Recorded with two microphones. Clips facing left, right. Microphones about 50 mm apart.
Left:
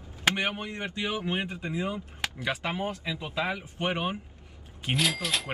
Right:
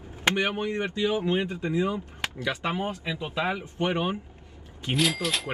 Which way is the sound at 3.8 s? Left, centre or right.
Centre.